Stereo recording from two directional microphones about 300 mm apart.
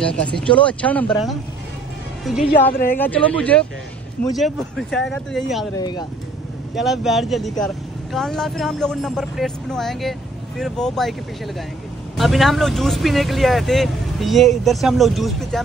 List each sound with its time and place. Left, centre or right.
0.0 s speech: centre
2.7 s speech: left
3.0 s speech: centre
5.8 s speech: centre
6.7 s speech: centre